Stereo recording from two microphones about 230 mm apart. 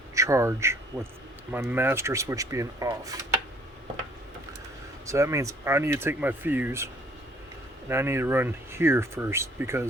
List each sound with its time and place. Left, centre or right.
0.1 s speech: centre
5.0 s speech: centre